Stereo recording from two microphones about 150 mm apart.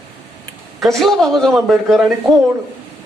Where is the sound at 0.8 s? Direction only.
Centre (ahead or behind).